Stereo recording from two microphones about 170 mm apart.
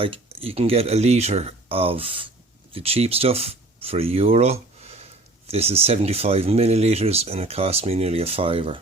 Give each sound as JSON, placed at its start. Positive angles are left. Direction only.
{"t": 0.0, "sound": "speech", "side_deg": -35}